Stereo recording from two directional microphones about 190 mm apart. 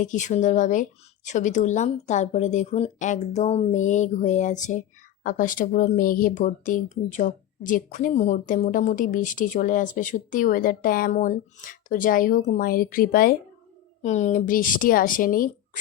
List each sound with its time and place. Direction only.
0.0 s speech: 40° left (ahead or behind)
14.0 s speech: 40° left (ahead or behind)